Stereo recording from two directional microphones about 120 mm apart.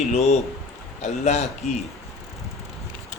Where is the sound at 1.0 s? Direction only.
70° left (ahead or behind).